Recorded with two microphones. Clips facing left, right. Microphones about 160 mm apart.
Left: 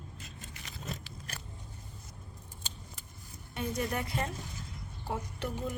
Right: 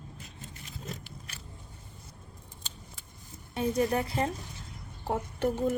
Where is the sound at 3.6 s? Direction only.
35° right (ahead or behind).